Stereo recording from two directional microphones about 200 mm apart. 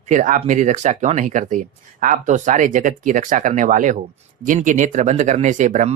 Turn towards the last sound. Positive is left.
turn(degrees=-40)  # may be behind; listen again after turning